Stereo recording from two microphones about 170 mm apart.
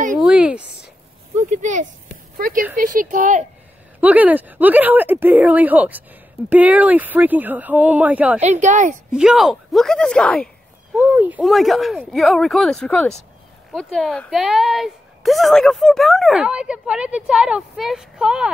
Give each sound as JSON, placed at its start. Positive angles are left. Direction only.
{"t": 0.2, "sound": "a sound", "side_deg": -5}
{"t": 1.5, "sound": "speech", "side_deg": -45}
{"t": 2.3, "sound": "speech", "side_deg": -55}
{"t": 4.0, "sound": "speech", "side_deg": -10}
{"t": 8.4, "sound": "speech", "side_deg": -45}
{"t": 9.1, "sound": "speech", "side_deg": -5}
{"t": 11.0, "sound": "speech", "side_deg": -5}